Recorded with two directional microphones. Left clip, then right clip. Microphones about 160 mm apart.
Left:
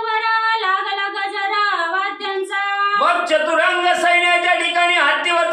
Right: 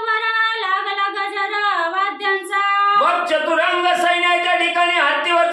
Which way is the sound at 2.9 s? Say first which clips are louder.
Even; 20° left (ahead or behind).